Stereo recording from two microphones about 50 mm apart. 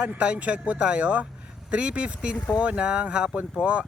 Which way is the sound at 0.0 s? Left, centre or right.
Right.